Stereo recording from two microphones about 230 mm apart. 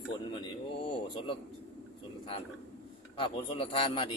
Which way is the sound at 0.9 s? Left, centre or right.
Left.